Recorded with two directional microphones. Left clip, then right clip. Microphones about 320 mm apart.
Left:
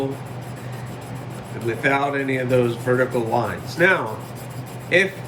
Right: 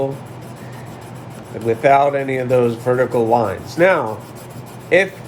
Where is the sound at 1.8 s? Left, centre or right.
Centre.